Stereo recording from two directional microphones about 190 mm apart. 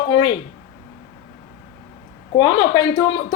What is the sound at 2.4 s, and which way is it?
Speech, 25° left (ahead or behind).